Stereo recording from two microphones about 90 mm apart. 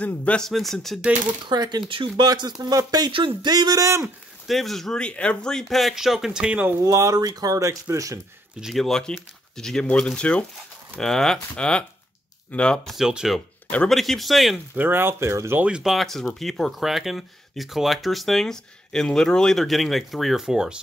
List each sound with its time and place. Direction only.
0.0 s speech: 15° left (ahead or behind)
0.5 s speech: centre (ahead or behind)
1.5 s speech: 50° right (ahead or behind)
3.1 s speech: 70° right (ahead or behind); by 4.1 s 35° right (ahead or behind)
4.5 s speech: centre (ahead or behind)
6.8 s speech: 35° right (ahead or behind)
8.5 s speech: centre (ahead or behind)
12.9 s speech: 5° right (ahead or behind)
14.8 s speech: 25° right (ahead or behind)
15.6 s speech: 5° right (ahead or behind)